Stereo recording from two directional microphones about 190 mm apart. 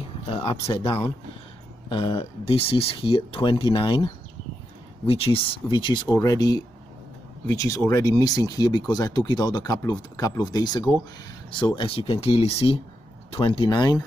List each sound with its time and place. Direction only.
0.3 s speech: 30° left (ahead or behind)